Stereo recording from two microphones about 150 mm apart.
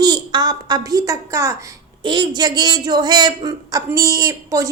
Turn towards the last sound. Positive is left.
turn(degrees=-20)  # may be behind; listen again after turning